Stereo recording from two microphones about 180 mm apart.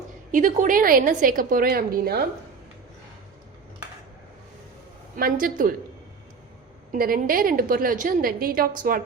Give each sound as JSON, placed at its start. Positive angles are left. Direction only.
{"t": 0.3, "sound": "a woman's voice", "side_deg": -45}
{"t": 5.1, "sound": "a woman's voice", "side_deg": -50}
{"t": 6.9, "sound": "a woman's voice", "side_deg": -50}